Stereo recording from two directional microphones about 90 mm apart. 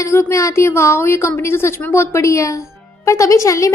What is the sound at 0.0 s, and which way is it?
A woman's voice, 30° left (ahead or behind).